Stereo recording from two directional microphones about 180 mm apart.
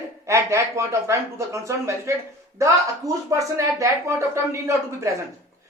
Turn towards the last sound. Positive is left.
turn(degrees=-15)  # may be behind; listen again after turning